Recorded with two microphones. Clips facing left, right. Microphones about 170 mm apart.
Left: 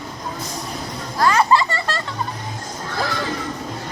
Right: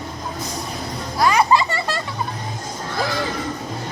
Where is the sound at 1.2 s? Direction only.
15° right (ahead or behind).